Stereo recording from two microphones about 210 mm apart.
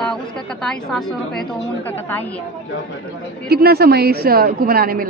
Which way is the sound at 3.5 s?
50° right (ahead or behind).